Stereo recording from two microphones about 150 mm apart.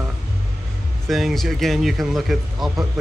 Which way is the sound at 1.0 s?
Centre (ahead or behind).